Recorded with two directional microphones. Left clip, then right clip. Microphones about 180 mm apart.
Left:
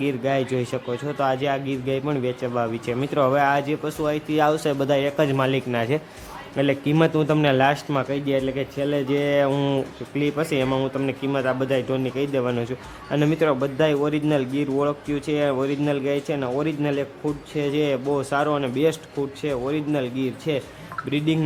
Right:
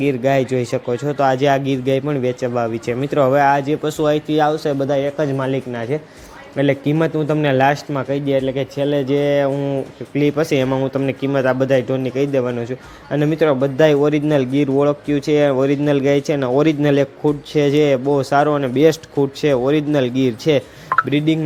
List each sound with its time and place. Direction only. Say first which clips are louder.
0.0 s speech: right 7 dB; 15° right (ahead or behind)
4.4 s a man's voice: right 4 dB; 10° right (ahead or behind)
6.6 s speech: right 3 dB; 15° right (ahead or behind)
9.5 s speech: right 2 dB; 10° left (ahead or behind)
10.2 s speech: right 6 dB; 20° right (ahead or behind)